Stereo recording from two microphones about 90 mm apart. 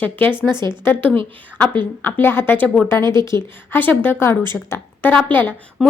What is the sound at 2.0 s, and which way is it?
A woman's voice, 25° left (ahead or behind).